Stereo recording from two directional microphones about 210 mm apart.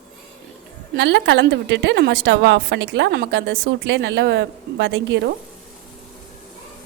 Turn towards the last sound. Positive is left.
turn(degrees=-55)  # may be behind; listen again after turning